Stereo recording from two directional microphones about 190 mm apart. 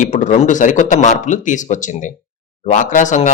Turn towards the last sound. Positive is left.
turn(degrees=40)  # may be behind; listen again after turning